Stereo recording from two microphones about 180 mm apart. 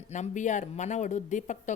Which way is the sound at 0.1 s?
40° left (ahead or behind).